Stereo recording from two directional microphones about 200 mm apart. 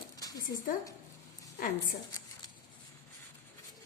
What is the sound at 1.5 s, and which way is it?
Speech, 45° left (ahead or behind).